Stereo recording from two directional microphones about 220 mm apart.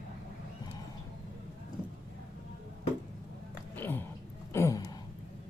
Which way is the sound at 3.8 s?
10° left (ahead or behind).